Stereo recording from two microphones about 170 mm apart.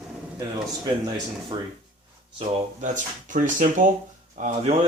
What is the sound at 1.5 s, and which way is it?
Speech, 25° right (ahead or behind).